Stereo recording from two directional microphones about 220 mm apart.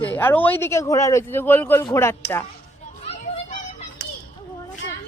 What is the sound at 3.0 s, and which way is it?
Children playing, 25° left (ahead or behind).